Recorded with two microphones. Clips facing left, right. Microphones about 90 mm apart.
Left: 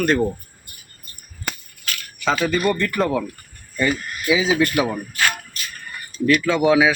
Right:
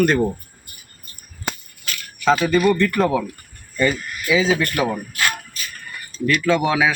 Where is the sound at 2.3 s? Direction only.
Centre (ahead or behind).